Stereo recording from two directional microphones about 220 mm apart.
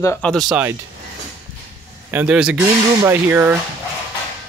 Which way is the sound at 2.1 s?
10° right (ahead or behind).